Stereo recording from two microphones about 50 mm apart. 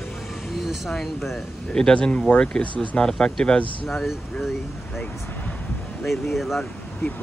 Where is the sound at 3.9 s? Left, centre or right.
Centre.